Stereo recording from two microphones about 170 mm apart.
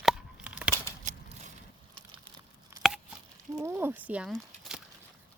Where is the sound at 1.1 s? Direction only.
50° right (ahead or behind).